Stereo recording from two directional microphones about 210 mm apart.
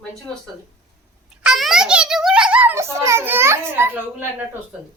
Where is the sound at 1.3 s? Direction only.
5° right (ahead or behind).